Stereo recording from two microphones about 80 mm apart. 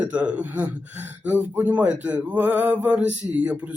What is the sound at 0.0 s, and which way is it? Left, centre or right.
Speech, centre.